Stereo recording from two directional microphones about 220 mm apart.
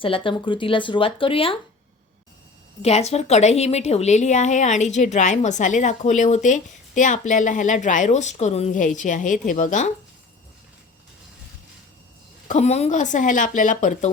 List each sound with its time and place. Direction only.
0.0 s speech: 25° left (ahead or behind)
2.8 s a woman's voice: 30° left (ahead or behind)
12.5 s a woman's voice: 30° left (ahead or behind)